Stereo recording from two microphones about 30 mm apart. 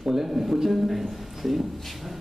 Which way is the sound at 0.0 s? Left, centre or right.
Centre.